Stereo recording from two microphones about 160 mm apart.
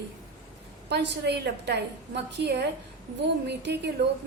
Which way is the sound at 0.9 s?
90° right.